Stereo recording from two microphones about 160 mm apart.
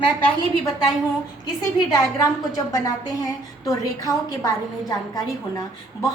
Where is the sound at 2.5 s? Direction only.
20° left (ahead or behind).